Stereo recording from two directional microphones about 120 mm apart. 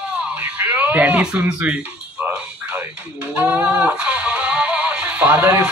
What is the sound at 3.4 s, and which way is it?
Music, 10° right (ahead or behind).